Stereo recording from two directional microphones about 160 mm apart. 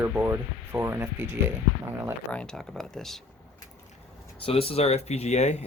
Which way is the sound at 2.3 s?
5° left (ahead or behind).